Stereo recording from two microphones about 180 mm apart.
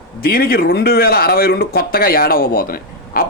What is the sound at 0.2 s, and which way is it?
Speech, 60° left (ahead or behind).